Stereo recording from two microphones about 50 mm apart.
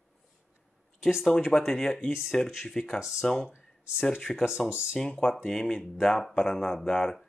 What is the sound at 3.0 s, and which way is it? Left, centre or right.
Speech, centre.